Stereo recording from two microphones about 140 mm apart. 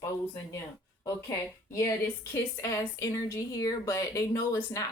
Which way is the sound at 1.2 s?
20° left (ahead or behind).